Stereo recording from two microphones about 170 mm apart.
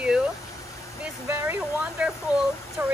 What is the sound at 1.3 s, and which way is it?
Speech, 15° right (ahead or behind).